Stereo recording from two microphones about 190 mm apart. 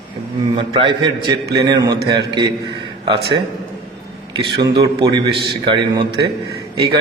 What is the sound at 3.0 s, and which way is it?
Speech, 25° right (ahead or behind).